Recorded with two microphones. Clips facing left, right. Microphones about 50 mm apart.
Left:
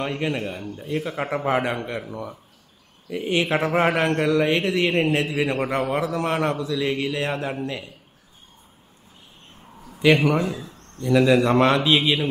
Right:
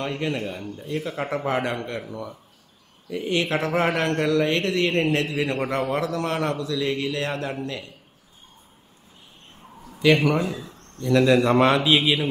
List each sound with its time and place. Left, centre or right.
0.0 s a man's voice: centre
9.9 s a man's voice: centre